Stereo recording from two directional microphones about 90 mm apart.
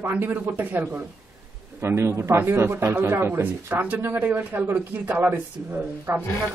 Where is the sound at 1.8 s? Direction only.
30° right (ahead or behind).